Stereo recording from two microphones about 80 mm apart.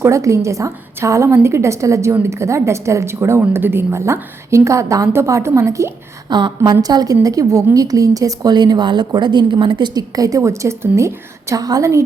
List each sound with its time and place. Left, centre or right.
0.0 s a woman's voice: right
6.2 s a woman's voice: right
6.8 s a woman's voice: right
11.6 s a woman's voice: right